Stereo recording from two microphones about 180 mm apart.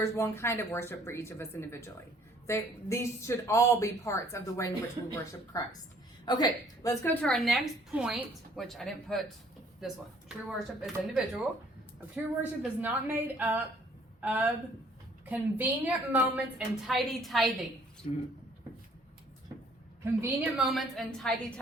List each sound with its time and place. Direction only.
0.0 s a woman's voice: 15° left (ahead or behind)
18.0 s speech: 40° left (ahead or behind)
20.2 s a woman's voice: centre (ahead or behind)